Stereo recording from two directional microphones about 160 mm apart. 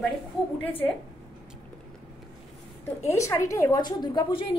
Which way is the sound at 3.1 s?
20° left (ahead or behind).